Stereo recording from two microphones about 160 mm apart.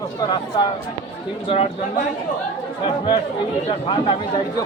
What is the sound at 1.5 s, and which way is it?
Speech, 40° left (ahead or behind).